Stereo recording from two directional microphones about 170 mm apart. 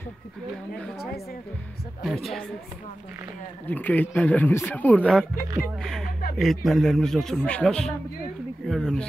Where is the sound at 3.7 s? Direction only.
10° left (ahead or behind).